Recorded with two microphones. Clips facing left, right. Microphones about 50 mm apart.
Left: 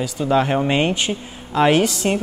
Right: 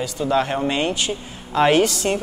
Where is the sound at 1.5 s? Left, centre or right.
Centre.